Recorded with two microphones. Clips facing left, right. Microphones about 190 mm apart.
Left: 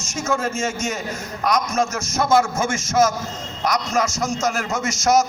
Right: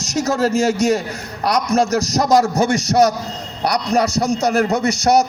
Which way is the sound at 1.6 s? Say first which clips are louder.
Right 6 dB; 35° right (ahead or behind).